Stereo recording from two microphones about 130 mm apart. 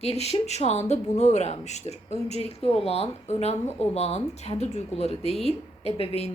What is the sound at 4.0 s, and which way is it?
A woman's voice, 55° left (ahead or behind).